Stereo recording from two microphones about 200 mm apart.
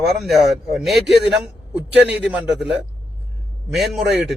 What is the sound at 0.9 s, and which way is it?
Speech, 60° right (ahead or behind).